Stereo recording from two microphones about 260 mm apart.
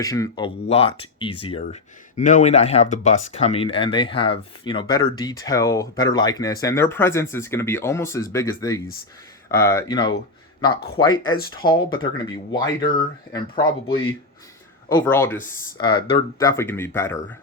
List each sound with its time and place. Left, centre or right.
0.0 s speech: centre